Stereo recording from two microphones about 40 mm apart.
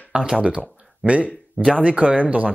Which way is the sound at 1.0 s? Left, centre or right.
Right.